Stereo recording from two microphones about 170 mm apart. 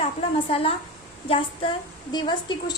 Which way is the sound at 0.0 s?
35° left (ahead or behind).